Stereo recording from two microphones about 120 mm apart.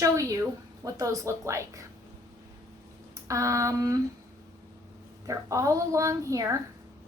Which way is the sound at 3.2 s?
25° right (ahead or behind).